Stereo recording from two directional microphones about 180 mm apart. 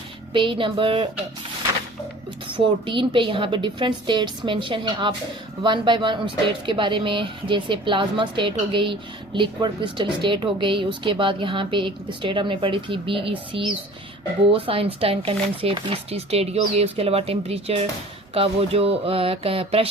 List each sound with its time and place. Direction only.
0.3 s speech: 30° right (ahead or behind)
2.5 s speech: 25° right (ahead or behind)